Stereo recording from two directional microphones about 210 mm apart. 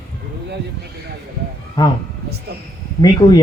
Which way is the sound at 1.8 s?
20° left (ahead or behind).